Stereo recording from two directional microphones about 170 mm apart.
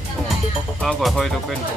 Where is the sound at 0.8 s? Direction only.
Centre (ahead or behind).